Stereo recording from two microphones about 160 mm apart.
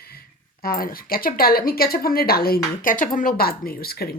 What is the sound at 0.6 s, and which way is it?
Speech, 65° left (ahead or behind).